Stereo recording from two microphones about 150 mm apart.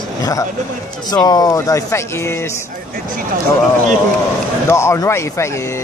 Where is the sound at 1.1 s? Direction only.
25° left (ahead or behind).